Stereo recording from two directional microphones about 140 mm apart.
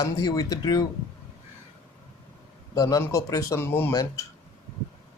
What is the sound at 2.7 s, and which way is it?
Speech, 25° left (ahead or behind).